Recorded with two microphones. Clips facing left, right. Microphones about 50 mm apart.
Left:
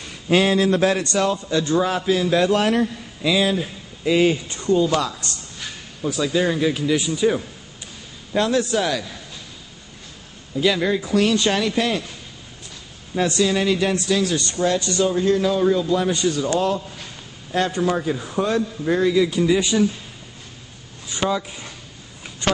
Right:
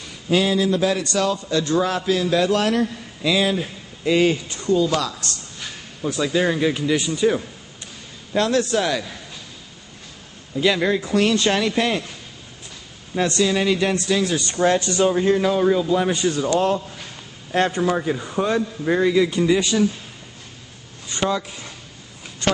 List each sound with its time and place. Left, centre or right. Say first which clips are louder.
0.3 s speech: left 2 dB; left
1.1 s a man's voice: left 1 dB; left
1.7 s a man's voice: left 1 dB; centre
2.8 s speech: even; centre
4.5 s a man's voice: left 1 dB; left
5.6 s a sound: even; centre
6.2 s a man's voice: even; centre
10.5 s a man's voice: even; centre
13.1 s speech: even; centre
14.5 s a man's voice: right 2 dB; right; by 16.3 s centre
17.7 s a man's voice: even; centre
19.3 s speech: even; centre
19.6 s a man's voice: even; centre
21.1 s a man's voice: even; centre